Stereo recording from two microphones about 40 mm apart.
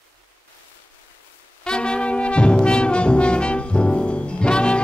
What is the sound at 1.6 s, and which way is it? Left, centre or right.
Brass instrument, left.